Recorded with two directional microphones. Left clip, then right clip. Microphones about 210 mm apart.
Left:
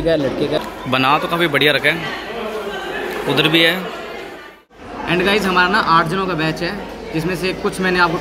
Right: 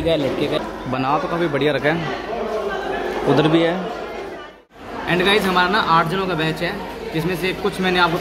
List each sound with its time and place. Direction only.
0.1 s speech: 10° left (ahead or behind)
0.9 s a man's voice: centre (ahead or behind)
3.3 s speech: 20° right (ahead or behind)
5.0 s speech: 5° left (ahead or behind)